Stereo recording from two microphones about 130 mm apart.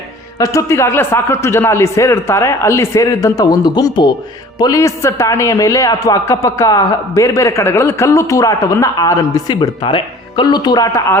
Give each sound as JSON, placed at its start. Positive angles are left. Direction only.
{"t": 0.3, "sound": "a man's voice", "side_deg": 25}